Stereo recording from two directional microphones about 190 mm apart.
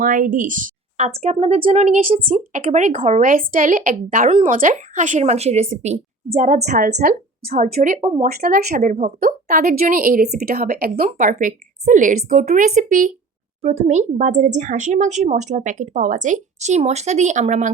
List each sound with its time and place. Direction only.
0.0 s a woman's voice: 45° right (ahead or behind)